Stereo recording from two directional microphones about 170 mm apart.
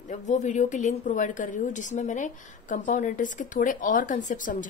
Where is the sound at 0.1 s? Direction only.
45° left (ahead or behind).